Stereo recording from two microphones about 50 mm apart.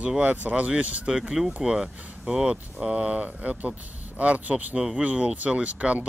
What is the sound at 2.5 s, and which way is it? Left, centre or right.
Speech, right.